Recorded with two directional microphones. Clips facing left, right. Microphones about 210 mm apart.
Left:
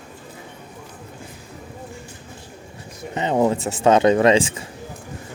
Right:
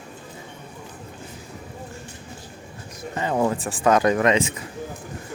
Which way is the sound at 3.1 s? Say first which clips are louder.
Left 3 dB; 20° left (ahead or behind).